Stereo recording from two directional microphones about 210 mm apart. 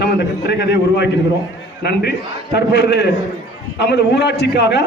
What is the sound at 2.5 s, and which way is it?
A man's voice, 55° left (ahead or behind).